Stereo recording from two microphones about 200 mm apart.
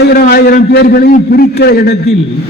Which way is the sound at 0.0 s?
50° left (ahead or behind).